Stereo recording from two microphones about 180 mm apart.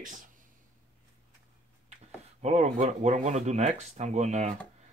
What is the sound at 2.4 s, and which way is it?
Speech, 40° right (ahead or behind).